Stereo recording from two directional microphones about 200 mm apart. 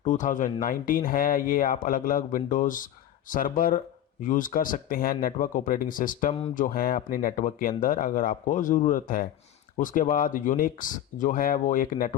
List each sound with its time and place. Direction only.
0.0 s speech: 40° left (ahead or behind)